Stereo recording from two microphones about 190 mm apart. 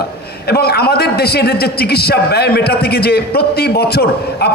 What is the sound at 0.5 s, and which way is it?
A man's voice, 55° left (ahead or behind).